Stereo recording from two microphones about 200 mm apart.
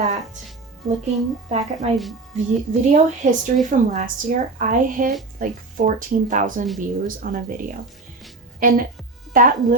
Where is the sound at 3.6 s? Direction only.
40° right (ahead or behind).